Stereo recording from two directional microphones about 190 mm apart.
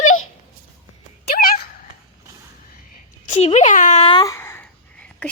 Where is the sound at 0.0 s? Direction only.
90° left.